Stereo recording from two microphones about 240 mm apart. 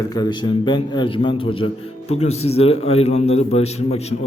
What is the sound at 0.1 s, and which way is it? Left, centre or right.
A man's voice, centre.